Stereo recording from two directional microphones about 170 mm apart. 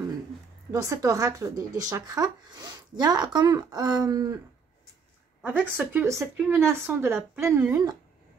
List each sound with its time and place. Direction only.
0.7 s speech: 20° right (ahead or behind)
5.4 s speech: 10° right (ahead or behind)